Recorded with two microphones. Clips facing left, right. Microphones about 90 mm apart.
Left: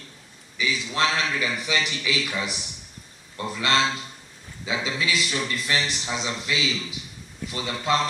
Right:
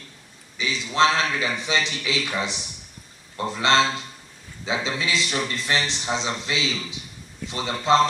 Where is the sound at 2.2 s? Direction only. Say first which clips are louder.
Right 2 dB; 40° right (ahead or behind).